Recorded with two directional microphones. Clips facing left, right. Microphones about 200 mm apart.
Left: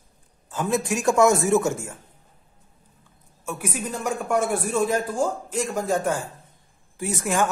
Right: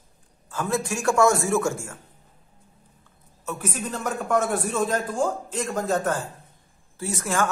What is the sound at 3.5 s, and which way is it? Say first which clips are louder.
A man's voice: left 1 dB; 10° left (ahead or behind).